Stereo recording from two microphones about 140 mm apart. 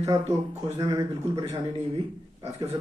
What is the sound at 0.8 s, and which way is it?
Speech, 25° right (ahead or behind).